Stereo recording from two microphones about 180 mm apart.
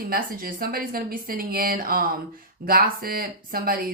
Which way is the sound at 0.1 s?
55° right (ahead or behind).